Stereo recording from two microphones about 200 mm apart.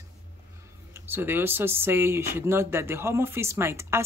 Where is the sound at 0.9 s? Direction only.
10° right (ahead or behind).